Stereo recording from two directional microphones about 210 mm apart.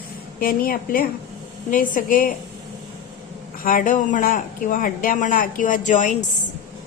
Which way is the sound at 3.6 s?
40° left (ahead or behind).